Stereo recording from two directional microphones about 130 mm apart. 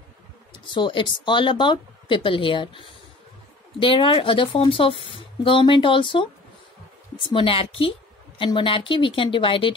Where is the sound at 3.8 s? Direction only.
40° left (ahead or behind).